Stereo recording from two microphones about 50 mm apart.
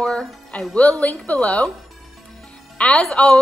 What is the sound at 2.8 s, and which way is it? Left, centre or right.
Speech, left.